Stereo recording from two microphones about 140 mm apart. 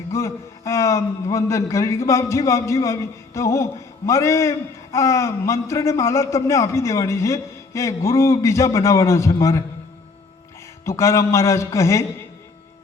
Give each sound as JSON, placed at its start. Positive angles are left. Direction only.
{"t": 0.1, "sound": "a man's voice", "side_deg": 20}
{"t": 10.8, "sound": "a man's voice", "side_deg": 20}